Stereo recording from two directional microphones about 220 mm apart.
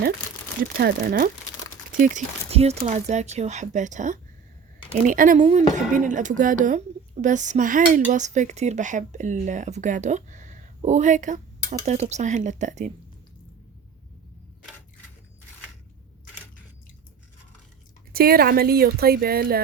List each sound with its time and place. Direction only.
0.8 s a woman's voice: 45° right (ahead or behind)
18.1 s a woman's voice: 45° right (ahead or behind)